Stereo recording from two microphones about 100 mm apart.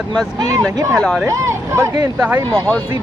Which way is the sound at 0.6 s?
30° right (ahead or behind).